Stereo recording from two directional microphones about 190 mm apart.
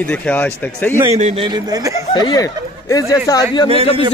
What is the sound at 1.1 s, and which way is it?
Speech, 30° right (ahead or behind).